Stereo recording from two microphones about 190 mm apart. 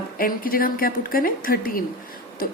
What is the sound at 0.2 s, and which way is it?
A woman's voice, 50° left (ahead or behind).